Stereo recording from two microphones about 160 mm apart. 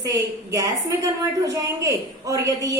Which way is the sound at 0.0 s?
20° right (ahead or behind).